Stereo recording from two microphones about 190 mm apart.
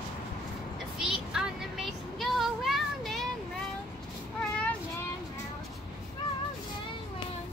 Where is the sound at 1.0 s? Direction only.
5° right (ahead or behind).